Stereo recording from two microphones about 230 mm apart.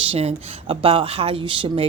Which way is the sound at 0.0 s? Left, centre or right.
Right.